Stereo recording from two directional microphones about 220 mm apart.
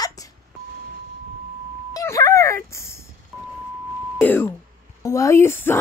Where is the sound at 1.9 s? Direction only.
15° left (ahead or behind).